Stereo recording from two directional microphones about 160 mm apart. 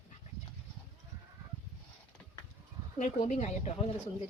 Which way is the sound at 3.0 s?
45° left (ahead or behind).